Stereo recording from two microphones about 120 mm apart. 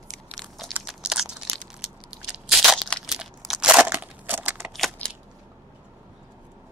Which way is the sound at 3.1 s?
5° right (ahead or behind).